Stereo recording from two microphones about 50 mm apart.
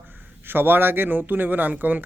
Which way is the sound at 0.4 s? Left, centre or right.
Right.